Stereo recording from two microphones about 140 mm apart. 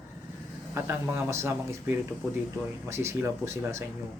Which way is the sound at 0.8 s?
20° right (ahead or behind).